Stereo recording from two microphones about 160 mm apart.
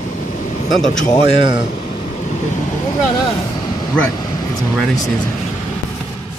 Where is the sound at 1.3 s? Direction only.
30° right (ahead or behind).